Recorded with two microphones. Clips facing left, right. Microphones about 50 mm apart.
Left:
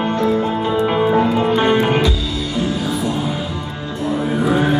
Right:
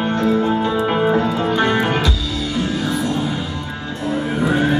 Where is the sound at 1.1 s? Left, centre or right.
Centre.